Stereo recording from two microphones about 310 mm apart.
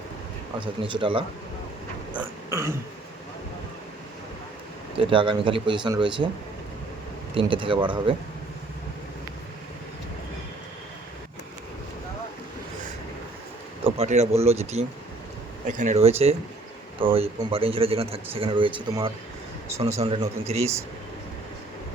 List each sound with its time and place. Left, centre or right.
0.6 s a man's voice: centre
2.5 s a man's voice: centre
4.9 s a man's voice: centre
7.3 s a man's voice: centre
13.8 s a man's voice: right